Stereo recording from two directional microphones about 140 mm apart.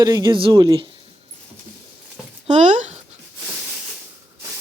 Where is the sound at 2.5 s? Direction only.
55° right (ahead or behind).